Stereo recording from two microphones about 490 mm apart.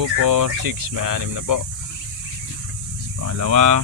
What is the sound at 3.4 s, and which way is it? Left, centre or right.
Speech, right.